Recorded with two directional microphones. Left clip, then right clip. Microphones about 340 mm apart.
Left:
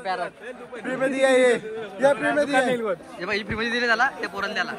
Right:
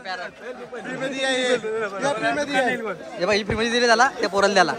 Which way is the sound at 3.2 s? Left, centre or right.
Centre.